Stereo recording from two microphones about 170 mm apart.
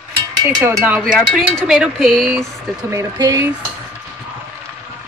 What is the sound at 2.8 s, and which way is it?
Speech, 20° right (ahead or behind).